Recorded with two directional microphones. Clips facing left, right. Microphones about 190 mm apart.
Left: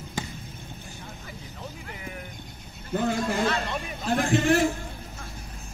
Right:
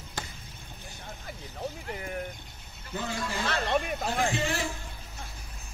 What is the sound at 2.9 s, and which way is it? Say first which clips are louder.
A man's voice: left 8 dB; 50° left (ahead or behind).